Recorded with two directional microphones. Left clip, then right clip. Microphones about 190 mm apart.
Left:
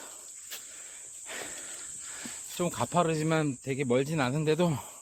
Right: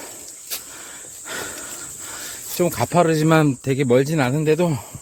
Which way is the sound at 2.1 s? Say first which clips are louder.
Right 12 dB; 35° right (ahead or behind).